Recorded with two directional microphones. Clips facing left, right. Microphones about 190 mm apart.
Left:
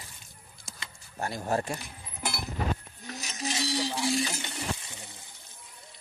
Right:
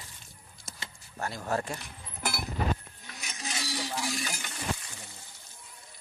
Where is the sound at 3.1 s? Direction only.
35° left (ahead or behind).